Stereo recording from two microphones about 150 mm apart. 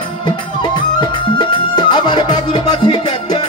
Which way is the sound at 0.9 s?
30° left (ahead or behind).